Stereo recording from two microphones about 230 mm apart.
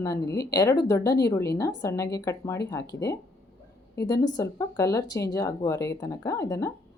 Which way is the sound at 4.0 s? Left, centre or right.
Centre.